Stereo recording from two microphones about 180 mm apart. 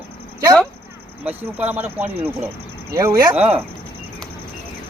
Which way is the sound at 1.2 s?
10° right (ahead or behind).